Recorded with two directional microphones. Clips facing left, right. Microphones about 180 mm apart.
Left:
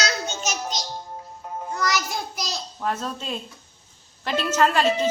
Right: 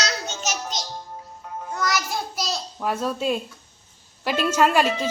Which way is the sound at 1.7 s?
Centre (ahead or behind).